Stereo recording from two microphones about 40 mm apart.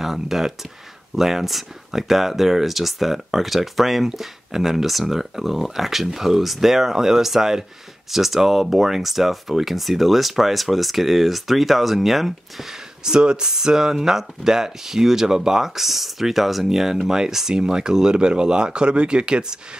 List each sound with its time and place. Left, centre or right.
0.0 s speech: centre
13.0 s speech: right